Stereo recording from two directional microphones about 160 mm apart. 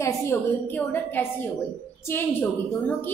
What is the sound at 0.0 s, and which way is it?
A woman's voice, 15° left (ahead or behind).